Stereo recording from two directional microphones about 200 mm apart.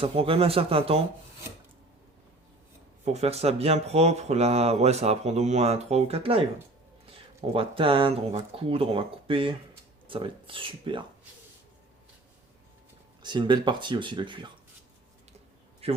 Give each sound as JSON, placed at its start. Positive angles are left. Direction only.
{"t": 0.0, "sound": "speech", "side_deg": -30}
{"t": 3.0, "sound": "speech", "side_deg": -35}
{"t": 7.5, "sound": "speech", "side_deg": -25}
{"t": 13.2, "sound": "speech", "side_deg": -20}
{"t": 15.8, "sound": "speech", "side_deg": -30}